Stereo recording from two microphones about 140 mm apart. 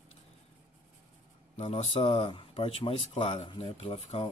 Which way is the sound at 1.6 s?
45° left (ahead or behind).